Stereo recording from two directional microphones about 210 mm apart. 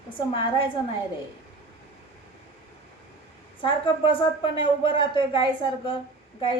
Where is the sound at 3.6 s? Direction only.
25° left (ahead or behind).